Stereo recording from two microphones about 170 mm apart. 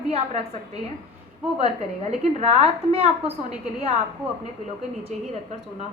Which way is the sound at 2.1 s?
40° right (ahead or behind).